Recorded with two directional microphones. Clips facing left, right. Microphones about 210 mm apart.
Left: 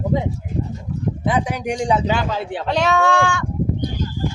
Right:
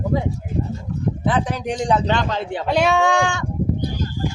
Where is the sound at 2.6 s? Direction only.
10° right (ahead or behind).